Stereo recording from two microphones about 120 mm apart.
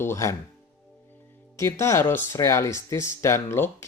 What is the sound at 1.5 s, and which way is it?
Speech, 25° left (ahead or behind).